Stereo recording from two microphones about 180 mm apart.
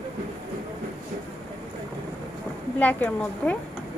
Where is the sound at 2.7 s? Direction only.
10° left (ahead or behind).